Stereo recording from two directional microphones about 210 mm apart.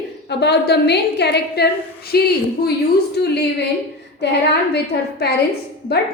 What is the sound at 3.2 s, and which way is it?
Speech, 50° left (ahead or behind).